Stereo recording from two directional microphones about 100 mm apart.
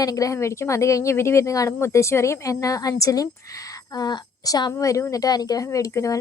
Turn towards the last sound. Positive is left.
turn(degrees=30)  # may be behind; listen again after turning